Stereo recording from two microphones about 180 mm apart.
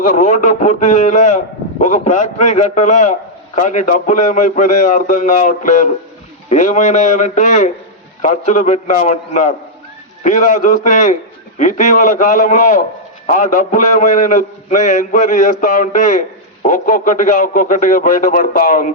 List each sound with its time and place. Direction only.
0.1 s a man's voice: 45° left (ahead or behind)